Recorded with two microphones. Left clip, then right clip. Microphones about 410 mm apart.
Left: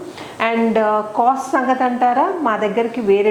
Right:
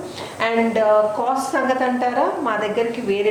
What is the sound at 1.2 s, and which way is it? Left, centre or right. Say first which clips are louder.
Speech: left 6 dB; left.